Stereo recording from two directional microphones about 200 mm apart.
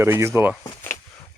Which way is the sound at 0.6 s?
15° left (ahead or behind).